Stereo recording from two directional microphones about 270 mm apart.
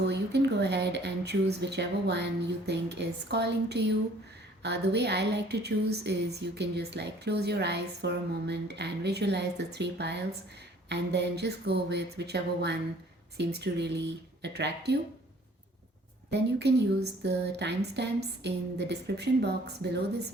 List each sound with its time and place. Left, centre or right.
0.1 s a woman's voice: right
16.3 s a woman's voice: right